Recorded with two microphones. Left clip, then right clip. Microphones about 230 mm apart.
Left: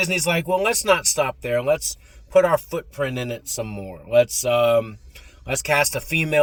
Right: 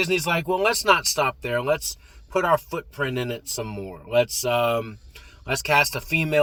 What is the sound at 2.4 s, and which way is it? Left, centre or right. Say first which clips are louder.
Speech: left 1 dB; left.